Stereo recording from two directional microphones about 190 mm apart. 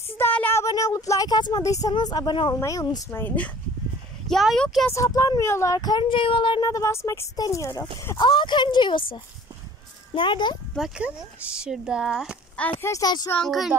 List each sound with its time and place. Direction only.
0.2 s speech: 10° left (ahead or behind)
4.8 s speech: 15° left (ahead or behind)
10.7 s speech: 5° right (ahead or behind)
12.8 s speech: 20° left (ahead or behind)
13.3 s speech: centre (ahead or behind)